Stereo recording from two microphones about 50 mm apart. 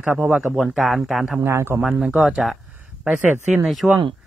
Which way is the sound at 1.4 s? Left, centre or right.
Right.